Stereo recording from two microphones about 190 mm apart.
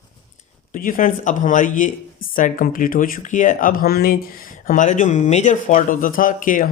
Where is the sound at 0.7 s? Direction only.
45° left (ahead or behind).